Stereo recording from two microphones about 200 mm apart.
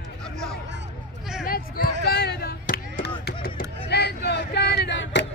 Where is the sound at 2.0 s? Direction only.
50° left (ahead or behind).